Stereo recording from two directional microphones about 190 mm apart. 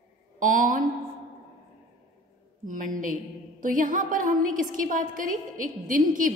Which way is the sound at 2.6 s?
45° right (ahead or behind).